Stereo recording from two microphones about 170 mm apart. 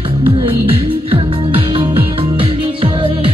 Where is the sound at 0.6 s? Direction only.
35° right (ahead or behind).